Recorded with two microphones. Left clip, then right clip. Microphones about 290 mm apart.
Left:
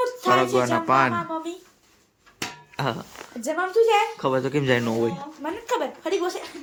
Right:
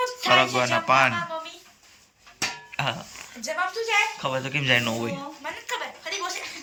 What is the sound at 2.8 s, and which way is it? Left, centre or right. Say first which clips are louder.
Speech: left 1 dB; centre.